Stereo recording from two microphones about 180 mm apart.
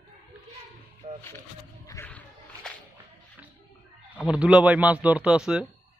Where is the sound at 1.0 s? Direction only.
35° right (ahead or behind).